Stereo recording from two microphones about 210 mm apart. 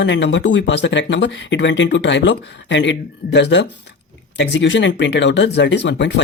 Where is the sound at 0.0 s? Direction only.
60° left (ahead or behind).